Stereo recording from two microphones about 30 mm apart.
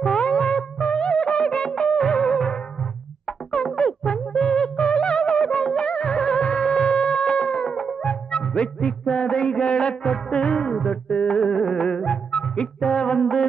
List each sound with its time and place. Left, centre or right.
0.0 s music: left